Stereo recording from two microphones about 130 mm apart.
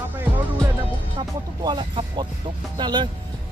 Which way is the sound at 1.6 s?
35° right (ahead or behind).